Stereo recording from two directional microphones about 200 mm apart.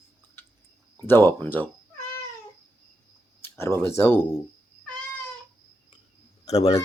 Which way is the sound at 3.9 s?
10° left (ahead or behind).